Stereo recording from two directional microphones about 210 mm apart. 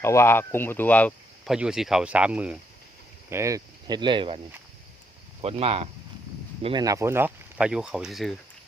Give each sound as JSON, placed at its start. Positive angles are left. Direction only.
{"t": 0.0, "sound": "speech", "side_deg": 10}
{"t": 1.5, "sound": "speech", "side_deg": -5}
{"t": 5.4, "sound": "speech", "side_deg": -30}